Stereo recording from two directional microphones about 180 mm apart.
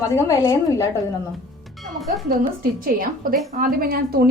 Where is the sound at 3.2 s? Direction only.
50° right (ahead or behind).